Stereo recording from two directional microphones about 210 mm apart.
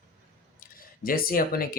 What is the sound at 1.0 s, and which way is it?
Speech, 45° left (ahead or behind).